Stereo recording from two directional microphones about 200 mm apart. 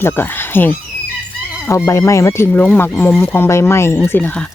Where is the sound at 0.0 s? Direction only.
10° left (ahead or behind).